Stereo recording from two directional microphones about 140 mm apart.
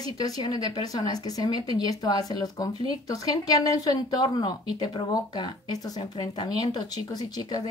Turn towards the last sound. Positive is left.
turn(degrees=30)  # may be behind; listen again after turning